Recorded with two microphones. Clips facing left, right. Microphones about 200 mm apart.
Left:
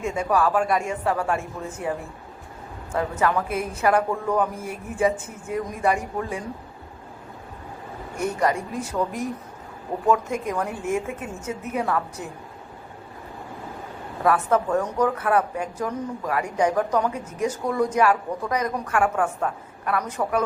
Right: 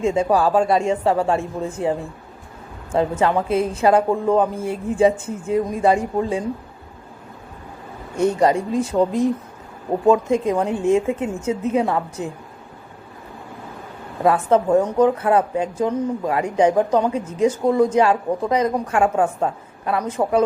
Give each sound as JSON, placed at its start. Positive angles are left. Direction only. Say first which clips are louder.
{"t": 0.0, "sound": "speech", "louder": "right 5 dB", "side_deg": -25}
{"t": 8.2, "sound": "speech", "louder": "right 7 dB", "side_deg": -25}
{"t": 14.3, "sound": "speech", "louder": "right 5 dB", "side_deg": -25}